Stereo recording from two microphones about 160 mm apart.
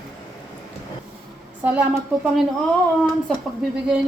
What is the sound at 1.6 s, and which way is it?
Speech, 10° right (ahead or behind).